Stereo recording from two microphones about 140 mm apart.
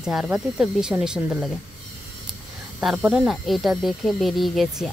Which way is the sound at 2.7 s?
10° right (ahead or behind).